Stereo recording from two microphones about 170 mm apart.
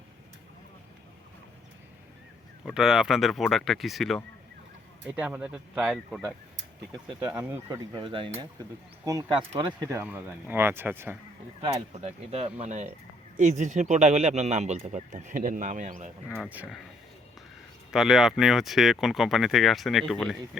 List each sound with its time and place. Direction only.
2.6 s speech: 5° right (ahead or behind)
7.7 s speech: 25° right (ahead or behind)
9.5 s speech: 30° right (ahead or behind)
9.9 s speech: 10° right (ahead or behind)
11.6 s speech: 40° right (ahead or behind)
16.4 s speech: 5° right (ahead or behind)
17.9 s speech: centre (ahead or behind)